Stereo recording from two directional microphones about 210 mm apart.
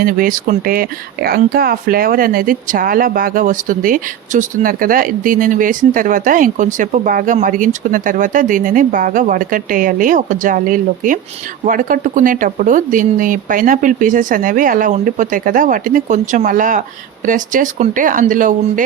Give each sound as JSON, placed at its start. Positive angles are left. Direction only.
{"t": 0.0, "sound": "speech", "side_deg": -40}